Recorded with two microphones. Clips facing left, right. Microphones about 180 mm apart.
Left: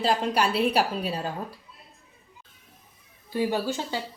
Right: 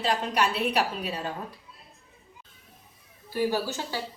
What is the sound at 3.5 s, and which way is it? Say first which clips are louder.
Speech: left 2 dB; 20° left (ahead or behind).